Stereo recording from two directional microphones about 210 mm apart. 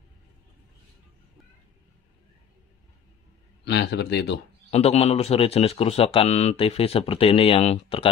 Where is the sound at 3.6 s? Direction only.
55° left (ahead or behind).